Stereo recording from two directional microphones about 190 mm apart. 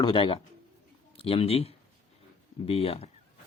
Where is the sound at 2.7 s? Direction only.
30° left (ahead or behind).